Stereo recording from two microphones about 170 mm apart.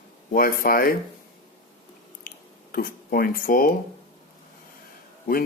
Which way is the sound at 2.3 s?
55° left (ahead or behind).